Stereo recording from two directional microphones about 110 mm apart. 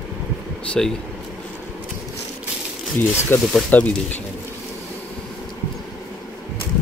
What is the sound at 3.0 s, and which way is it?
Speech, 20° left (ahead or behind).